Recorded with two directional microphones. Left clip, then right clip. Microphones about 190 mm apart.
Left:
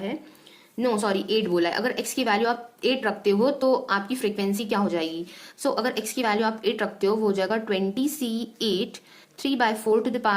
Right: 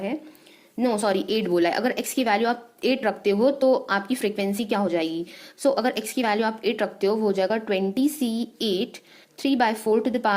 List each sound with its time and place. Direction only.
0.8 s a woman's voice: 25° right (ahead or behind)